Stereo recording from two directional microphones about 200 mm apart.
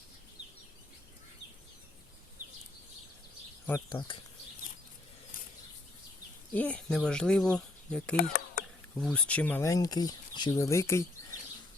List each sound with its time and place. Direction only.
3.7 s speech: 15° left (ahead or behind)
6.5 s speech: 5° left (ahead or behind)
8.1 s a sound: 45° left (ahead or behind)
9.0 s speech: 5° left (ahead or behind)